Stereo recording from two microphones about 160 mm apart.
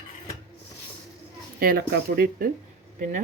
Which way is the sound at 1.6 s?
70° right (ahead or behind).